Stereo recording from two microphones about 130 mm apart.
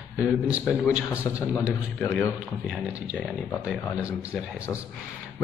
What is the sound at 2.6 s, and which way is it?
Speech, 5° right (ahead or behind).